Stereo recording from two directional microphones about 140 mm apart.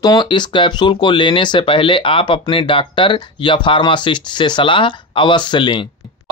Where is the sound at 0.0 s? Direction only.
30° left (ahead or behind).